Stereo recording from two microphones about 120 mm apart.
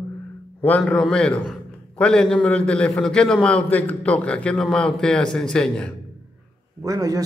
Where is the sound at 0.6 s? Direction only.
10° left (ahead or behind).